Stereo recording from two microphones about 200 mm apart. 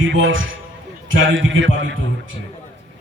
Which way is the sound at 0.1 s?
70° right (ahead or behind).